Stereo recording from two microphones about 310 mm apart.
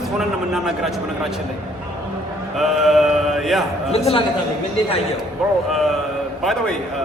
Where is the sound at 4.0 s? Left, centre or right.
Centre.